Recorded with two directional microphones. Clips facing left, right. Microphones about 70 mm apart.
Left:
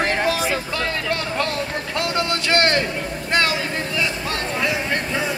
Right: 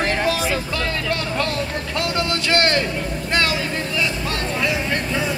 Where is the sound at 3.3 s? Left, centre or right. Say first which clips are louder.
Left 1 dB; left.